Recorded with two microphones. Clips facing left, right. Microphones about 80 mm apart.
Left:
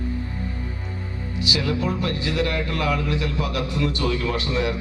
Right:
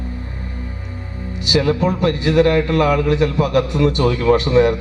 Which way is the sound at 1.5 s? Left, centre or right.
Right.